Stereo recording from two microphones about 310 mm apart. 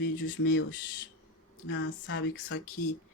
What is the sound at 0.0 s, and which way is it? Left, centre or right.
Speech, left.